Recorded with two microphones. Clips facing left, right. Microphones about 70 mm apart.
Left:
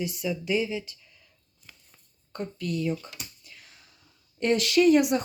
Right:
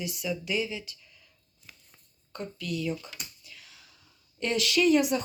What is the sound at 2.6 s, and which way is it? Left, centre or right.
Speech, left.